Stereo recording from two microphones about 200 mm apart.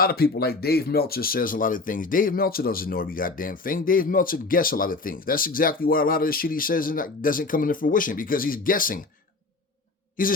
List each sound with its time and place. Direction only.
0.0 s speech: 50° left (ahead or behind)
10.2 s speech: 45° left (ahead or behind)